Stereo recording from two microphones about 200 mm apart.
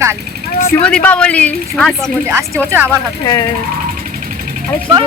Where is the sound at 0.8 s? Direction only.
5° left (ahead or behind).